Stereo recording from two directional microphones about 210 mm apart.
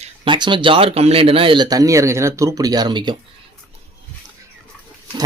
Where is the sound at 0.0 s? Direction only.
20° right (ahead or behind).